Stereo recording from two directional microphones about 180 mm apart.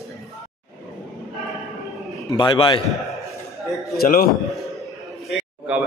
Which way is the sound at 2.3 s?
25° left (ahead or behind).